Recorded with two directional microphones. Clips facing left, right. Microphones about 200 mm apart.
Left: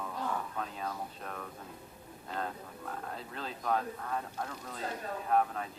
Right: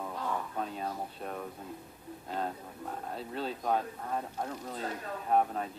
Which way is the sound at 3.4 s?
30° right (ahead or behind).